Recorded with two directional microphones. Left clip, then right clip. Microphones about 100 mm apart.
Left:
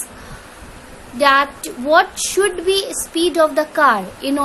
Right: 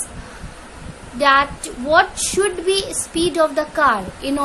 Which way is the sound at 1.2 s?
30° left (ahead or behind).